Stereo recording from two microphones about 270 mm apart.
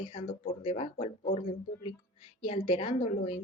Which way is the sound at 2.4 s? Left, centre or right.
Left.